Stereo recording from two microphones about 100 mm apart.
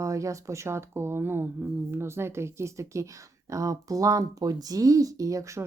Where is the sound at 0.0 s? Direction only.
30° right (ahead or behind).